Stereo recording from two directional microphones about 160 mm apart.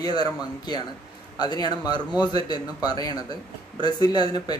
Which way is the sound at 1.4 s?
25° left (ahead or behind).